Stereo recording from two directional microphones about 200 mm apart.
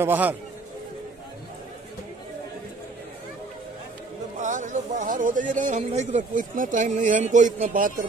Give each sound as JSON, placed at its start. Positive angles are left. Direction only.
{"t": 0.0, "sound": "speech", "side_deg": -10}
{"t": 4.4, "sound": "speech", "side_deg": -40}